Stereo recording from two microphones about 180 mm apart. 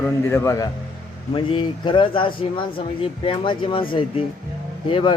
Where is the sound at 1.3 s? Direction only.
25° left (ahead or behind).